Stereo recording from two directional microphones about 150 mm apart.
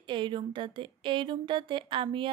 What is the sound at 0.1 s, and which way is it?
A woman's voice, 30° right (ahead or behind).